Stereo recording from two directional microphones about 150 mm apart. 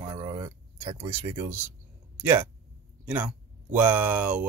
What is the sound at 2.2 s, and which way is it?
Speech, 10° right (ahead or behind).